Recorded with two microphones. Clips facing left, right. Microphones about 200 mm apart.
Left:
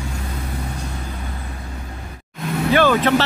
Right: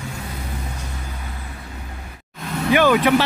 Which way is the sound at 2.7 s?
15° right (ahead or behind).